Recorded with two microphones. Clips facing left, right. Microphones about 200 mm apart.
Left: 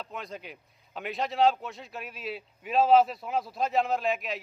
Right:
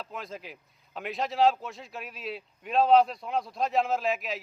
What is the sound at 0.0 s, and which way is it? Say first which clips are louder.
A man's voice: even; centre (ahead or behind).